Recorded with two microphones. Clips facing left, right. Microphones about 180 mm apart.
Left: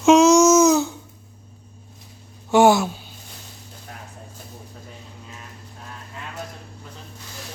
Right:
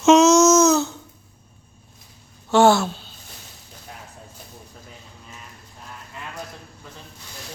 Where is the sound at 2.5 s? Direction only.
15° left (ahead or behind).